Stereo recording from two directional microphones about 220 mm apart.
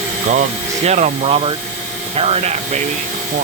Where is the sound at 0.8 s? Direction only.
30° right (ahead or behind).